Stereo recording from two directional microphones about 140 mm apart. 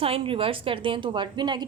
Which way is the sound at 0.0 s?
40° right (ahead or behind).